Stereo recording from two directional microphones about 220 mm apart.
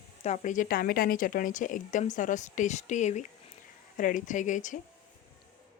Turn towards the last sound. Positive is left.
turn(degrees=35)  # may be behind; listen again after turning